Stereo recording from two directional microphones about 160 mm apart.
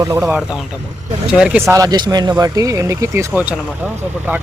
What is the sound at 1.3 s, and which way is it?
Speech, 5° right (ahead or behind).